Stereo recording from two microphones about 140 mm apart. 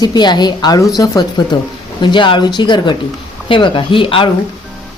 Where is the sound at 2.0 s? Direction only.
35° left (ahead or behind).